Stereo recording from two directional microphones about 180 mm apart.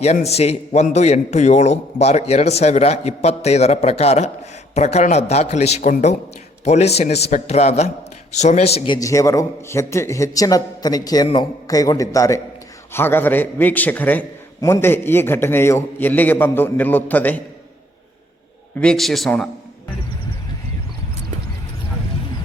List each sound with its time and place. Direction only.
0.0 s a man's voice: 35° left (ahead or behind)
9.0 s a man's voice: 15° left (ahead or behind)
18.8 s a man's voice: 5° left (ahead or behind)